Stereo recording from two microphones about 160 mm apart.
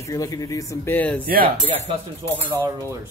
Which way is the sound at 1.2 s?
65° right (ahead or behind).